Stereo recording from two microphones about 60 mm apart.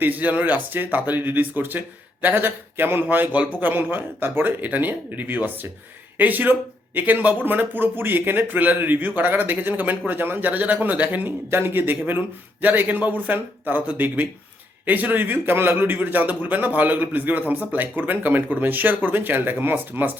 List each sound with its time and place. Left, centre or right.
0.0 s a man's voice: right